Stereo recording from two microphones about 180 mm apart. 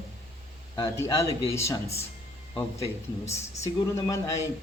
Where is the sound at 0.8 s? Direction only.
15° left (ahead or behind).